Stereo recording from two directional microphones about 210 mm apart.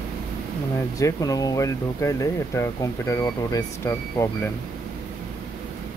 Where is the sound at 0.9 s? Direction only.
15° left (ahead or behind).